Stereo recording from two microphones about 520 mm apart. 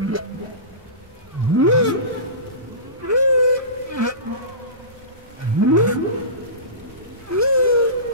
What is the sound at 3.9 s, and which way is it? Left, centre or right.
Insect, right.